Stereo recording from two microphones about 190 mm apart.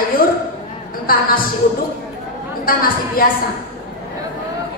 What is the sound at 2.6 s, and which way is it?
Speech, 50° left (ahead or behind).